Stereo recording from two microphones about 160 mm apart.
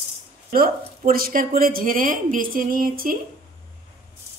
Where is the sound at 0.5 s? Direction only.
65° right (ahead or behind).